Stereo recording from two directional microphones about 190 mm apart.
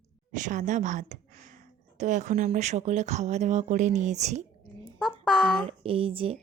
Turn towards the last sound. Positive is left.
turn(degrees=-30)  # may be behind; listen again after turning